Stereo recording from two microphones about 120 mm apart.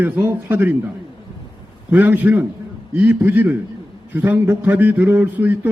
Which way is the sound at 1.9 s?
15° right (ahead or behind).